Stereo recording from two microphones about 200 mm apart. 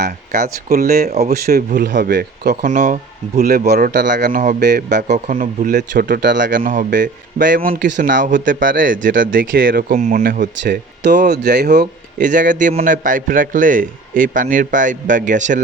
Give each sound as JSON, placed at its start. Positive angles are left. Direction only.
{"t": 0.0, "sound": "a man's voice", "side_deg": -45}
{"t": 6.2, "sound": "speech", "side_deg": -60}
{"t": 6.5, "sound": "speech", "side_deg": -40}
{"t": 11.3, "sound": "speech", "side_deg": -55}
{"t": 12.2, "sound": "a man's voice", "side_deg": -40}